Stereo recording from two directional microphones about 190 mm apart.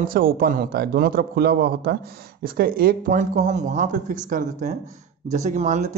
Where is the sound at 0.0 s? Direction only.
50° right (ahead or behind).